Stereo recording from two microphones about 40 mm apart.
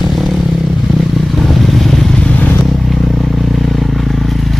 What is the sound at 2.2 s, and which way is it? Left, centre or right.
Vehicle, left.